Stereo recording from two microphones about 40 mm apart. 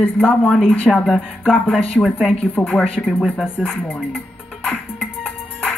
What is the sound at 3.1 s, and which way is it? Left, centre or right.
Speech, centre.